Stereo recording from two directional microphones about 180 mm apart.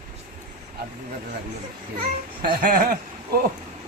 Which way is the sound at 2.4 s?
55° right (ahead or behind).